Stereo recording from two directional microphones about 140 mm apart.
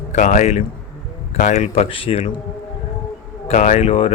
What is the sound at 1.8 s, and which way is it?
Speech, 40° left (ahead or behind).